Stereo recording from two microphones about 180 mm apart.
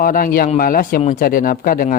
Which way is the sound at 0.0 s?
50° left (ahead or behind).